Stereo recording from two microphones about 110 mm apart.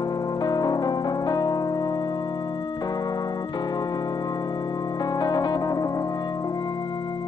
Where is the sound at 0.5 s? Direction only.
40° left (ahead or behind).